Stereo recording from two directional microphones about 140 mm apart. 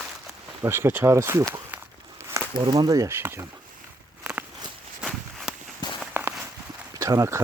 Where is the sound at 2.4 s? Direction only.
20° right (ahead or behind).